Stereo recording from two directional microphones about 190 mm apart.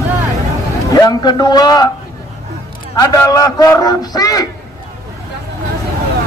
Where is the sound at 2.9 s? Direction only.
15° left (ahead or behind).